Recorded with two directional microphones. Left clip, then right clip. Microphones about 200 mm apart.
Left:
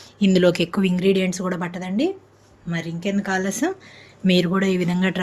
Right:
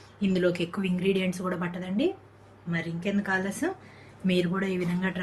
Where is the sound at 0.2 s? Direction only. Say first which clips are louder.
Left 9 dB; 45° left (ahead or behind).